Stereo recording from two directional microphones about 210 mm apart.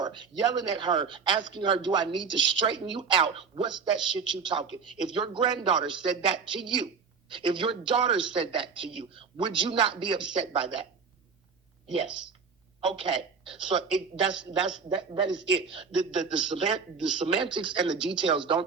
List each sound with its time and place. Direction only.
0.0 s a man's voice: 20° right (ahead or behind)
12.8 s speech: 25° right (ahead or behind)
14.8 s a man's voice: 25° right (ahead or behind)